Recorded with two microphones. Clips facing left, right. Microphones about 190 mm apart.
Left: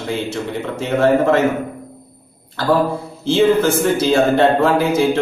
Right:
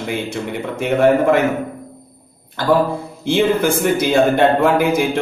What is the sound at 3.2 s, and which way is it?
A man's voice, 15° right (ahead or behind).